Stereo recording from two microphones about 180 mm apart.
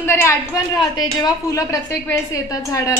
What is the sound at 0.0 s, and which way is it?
A woman's voice, 15° left (ahead or behind).